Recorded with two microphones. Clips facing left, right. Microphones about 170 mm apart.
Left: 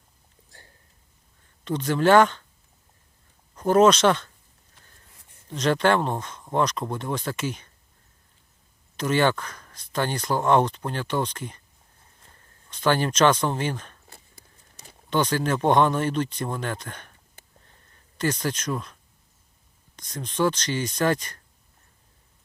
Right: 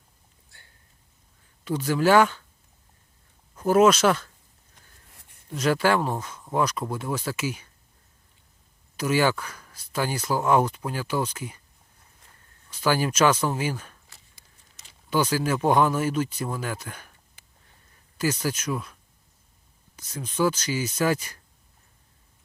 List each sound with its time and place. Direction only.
1.6 s speech: 5° right (ahead or behind)
3.5 s speech: 5° right (ahead or behind)
5.5 s speech: 5° right (ahead or behind)
9.0 s speech: 10° right (ahead or behind)
12.7 s speech: 10° right (ahead or behind)
14.1 s a sound: 55° left (ahead or behind)
15.1 s speech: 10° right (ahead or behind)
18.2 s speech: 5° right (ahead or behind)
20.0 s speech: 5° right (ahead or behind)